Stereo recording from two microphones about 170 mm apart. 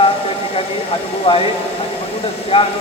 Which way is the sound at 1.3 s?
30° left (ahead or behind).